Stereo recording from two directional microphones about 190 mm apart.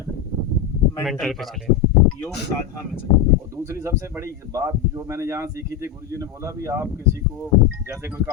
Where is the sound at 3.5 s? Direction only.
15° right (ahead or behind).